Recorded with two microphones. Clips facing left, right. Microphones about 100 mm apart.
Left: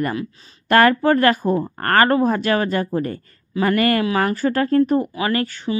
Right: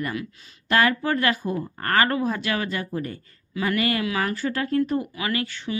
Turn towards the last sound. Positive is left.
turn(degrees=40)  # may be behind; listen again after turning